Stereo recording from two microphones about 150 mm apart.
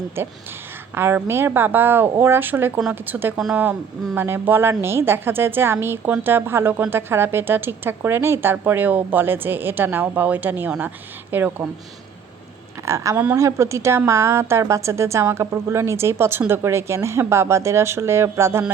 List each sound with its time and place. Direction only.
0.2 s a woman's voice: 15° right (ahead or behind)
12.8 s a woman's voice: 20° right (ahead or behind)